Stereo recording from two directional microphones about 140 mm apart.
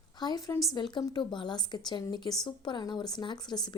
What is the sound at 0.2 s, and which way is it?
A woman's voice, 30° left (ahead or behind).